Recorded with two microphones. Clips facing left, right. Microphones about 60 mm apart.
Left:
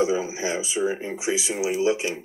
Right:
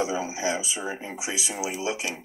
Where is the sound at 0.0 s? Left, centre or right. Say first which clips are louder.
Left 3 dB; left.